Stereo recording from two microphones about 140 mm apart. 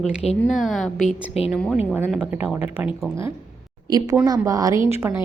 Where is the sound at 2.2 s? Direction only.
15° right (ahead or behind).